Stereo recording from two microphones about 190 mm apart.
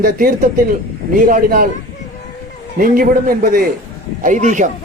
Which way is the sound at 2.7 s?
45° right (ahead or behind).